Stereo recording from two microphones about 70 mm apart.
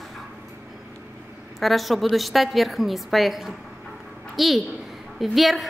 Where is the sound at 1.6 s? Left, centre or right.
Centre.